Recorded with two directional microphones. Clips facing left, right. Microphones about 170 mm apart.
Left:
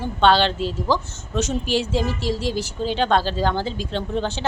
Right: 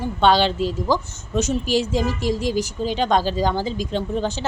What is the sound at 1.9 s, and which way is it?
Speech, 45° right (ahead or behind).